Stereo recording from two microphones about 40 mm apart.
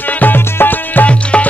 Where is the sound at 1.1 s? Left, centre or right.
Left.